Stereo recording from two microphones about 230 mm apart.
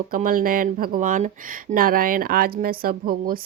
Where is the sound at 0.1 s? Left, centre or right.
Right.